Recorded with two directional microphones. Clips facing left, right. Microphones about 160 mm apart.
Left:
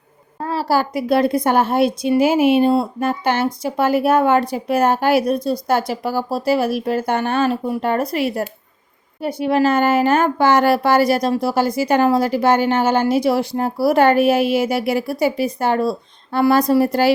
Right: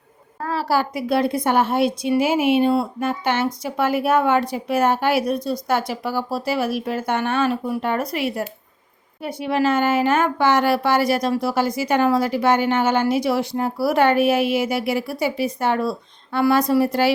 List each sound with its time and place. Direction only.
0.4 s speech: 30° left (ahead or behind)